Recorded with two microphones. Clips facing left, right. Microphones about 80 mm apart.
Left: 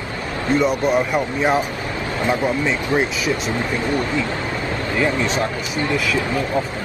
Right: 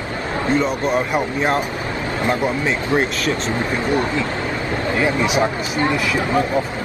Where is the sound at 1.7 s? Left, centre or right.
Right.